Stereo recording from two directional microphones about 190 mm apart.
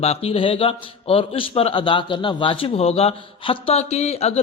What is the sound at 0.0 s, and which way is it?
A man's voice, 30° left (ahead or behind).